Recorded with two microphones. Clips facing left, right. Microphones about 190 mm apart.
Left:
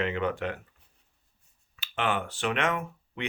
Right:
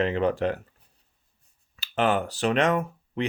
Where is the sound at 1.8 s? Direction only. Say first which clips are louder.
Right 6 dB; 40° right (ahead or behind).